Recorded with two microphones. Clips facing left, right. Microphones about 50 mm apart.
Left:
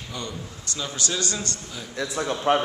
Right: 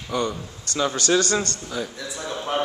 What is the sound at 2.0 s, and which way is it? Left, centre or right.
Speech, left.